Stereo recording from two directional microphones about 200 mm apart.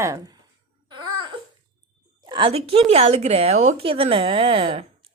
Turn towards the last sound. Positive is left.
turn(degrees=-25)  # may be behind; listen again after turning